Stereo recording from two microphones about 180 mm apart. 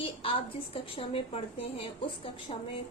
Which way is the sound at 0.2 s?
30° left (ahead or behind).